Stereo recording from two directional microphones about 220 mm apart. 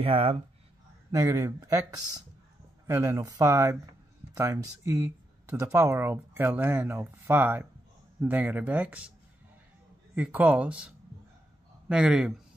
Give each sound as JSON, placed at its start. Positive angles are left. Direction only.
{"t": 0.0, "sound": "speech", "side_deg": -25}
{"t": 1.1, "sound": "speech", "side_deg": -15}
{"t": 2.9, "sound": "speech", "side_deg": -15}
{"t": 10.1, "sound": "speech", "side_deg": -5}